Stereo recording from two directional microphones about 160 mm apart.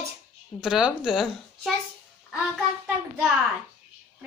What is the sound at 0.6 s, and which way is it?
Speech, 5° right (ahead or behind).